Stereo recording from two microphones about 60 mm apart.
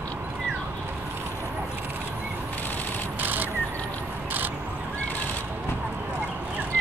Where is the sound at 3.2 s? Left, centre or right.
Right.